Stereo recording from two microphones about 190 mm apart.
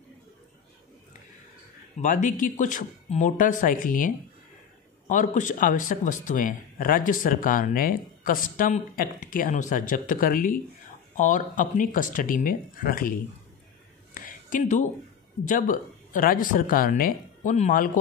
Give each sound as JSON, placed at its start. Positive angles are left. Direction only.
{"t": 2.0, "sound": "speech", "side_deg": 40}
{"t": 14.1, "sound": "a sound", "side_deg": 45}
{"t": 15.4, "sound": "speech", "side_deg": 45}